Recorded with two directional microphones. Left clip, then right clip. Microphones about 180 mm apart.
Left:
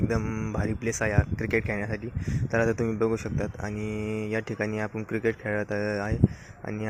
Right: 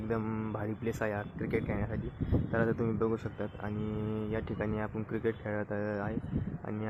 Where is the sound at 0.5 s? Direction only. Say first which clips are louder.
Left 8 dB; 20° left (ahead or behind).